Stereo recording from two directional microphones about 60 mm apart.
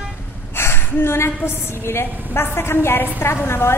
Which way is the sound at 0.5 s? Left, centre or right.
Left.